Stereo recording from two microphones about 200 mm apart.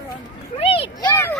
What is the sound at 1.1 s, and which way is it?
Speech, 10° left (ahead or behind).